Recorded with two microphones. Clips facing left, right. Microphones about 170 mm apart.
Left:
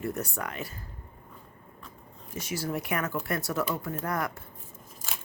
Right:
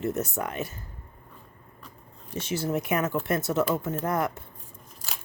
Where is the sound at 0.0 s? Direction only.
20° right (ahead or behind).